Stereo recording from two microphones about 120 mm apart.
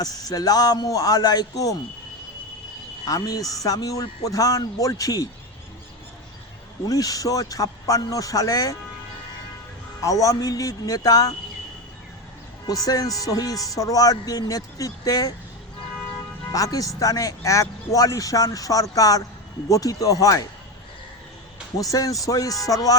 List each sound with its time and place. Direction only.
0.0 s a man's voice: 30° left (ahead or behind)
3.1 s speech: 30° left (ahead or behind)
6.8 s speech: 30° left (ahead or behind)
10.0 s speech: 25° left (ahead or behind)
12.6 s speech: 30° left (ahead or behind)
16.5 s speech: 30° left (ahead or behind)
21.8 s speech: 30° left (ahead or behind)